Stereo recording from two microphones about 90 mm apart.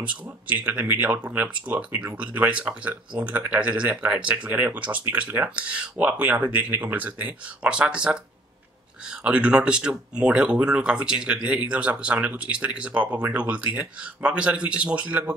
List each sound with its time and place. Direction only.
0.0 s speech: 15° right (ahead or behind)